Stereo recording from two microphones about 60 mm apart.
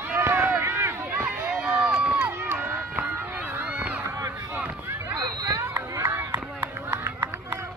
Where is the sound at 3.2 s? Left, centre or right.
Right.